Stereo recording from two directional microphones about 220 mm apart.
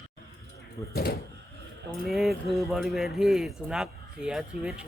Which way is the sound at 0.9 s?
45° left (ahead or behind).